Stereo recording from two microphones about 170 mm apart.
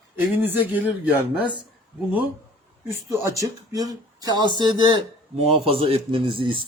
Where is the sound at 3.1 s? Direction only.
20° right (ahead or behind).